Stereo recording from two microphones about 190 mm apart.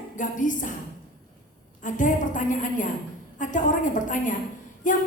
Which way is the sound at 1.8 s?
45° left (ahead or behind).